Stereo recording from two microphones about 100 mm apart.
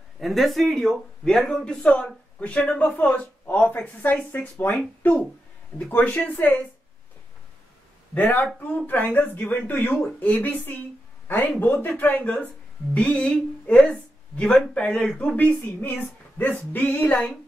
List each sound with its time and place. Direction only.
0.2 s speech: centre (ahead or behind); by 4.7 s 20° left (ahead or behind)
5.9 s speech: 15° left (ahead or behind)
8.1 s speech: 15° left (ahead or behind)